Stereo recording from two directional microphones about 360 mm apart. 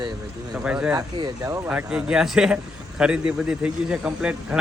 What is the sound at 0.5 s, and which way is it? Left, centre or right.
A man's voice, centre.